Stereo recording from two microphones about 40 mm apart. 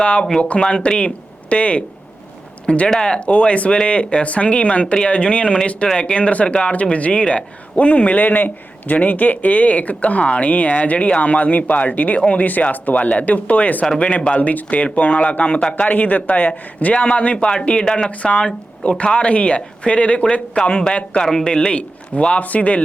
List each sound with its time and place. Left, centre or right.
0.0 s speech: left
14.0 s speech: left
22.4 s speech: left